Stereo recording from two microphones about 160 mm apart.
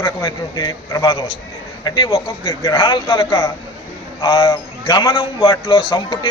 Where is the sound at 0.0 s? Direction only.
25° left (ahead or behind).